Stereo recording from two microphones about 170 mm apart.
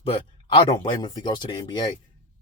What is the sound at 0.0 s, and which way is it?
Speech, 30° left (ahead or behind).